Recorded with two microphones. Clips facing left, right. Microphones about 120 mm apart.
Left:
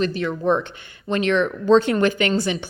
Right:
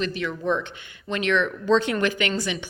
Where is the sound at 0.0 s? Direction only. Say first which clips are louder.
Left 5 dB; 40° left (ahead or behind).